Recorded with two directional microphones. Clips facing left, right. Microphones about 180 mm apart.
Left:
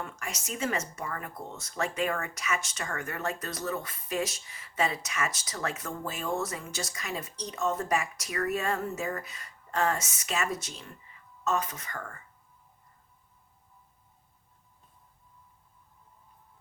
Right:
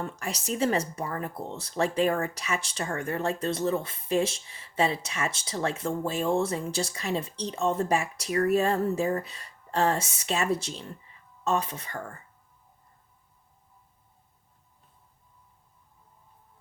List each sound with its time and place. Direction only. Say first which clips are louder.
0.0 s speech: right 5 dB; 35° right (ahead or behind)